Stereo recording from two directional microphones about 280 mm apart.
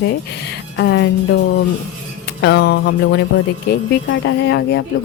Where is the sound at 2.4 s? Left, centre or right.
Left.